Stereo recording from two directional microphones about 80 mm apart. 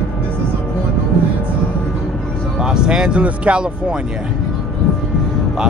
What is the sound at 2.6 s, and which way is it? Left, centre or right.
Speech, centre.